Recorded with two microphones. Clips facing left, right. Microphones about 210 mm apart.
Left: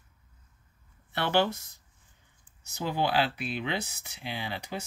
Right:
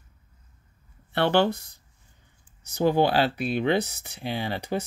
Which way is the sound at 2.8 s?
45° right (ahead or behind).